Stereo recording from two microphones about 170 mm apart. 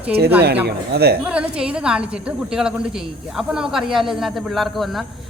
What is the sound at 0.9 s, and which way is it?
Speech, 70° right (ahead or behind).